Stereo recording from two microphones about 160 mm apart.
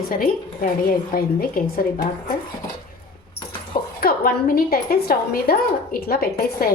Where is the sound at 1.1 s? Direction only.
65° left (ahead or behind).